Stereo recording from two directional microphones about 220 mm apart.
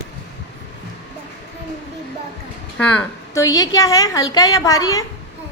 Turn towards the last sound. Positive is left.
turn(degrees=15)  # may be behind; listen again after turning